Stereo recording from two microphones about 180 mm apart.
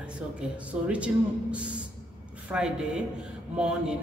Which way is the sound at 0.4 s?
5° right (ahead or behind).